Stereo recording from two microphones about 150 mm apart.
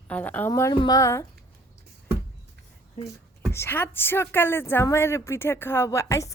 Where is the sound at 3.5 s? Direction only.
15° left (ahead or behind).